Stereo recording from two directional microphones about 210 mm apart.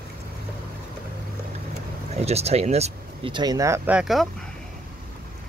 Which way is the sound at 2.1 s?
30° right (ahead or behind).